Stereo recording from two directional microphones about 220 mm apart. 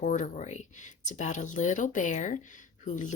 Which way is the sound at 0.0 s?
35° left (ahead or behind).